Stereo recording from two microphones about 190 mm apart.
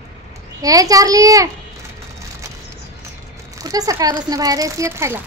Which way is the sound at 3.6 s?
20° right (ahead or behind).